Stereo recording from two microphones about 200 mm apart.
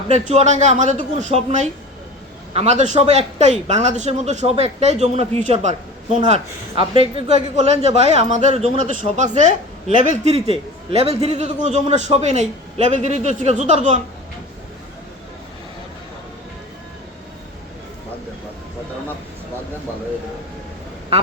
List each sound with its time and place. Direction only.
0.1 s a man's voice: 35° right (ahead or behind)